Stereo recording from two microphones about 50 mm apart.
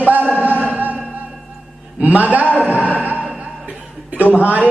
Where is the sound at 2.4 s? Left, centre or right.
Left.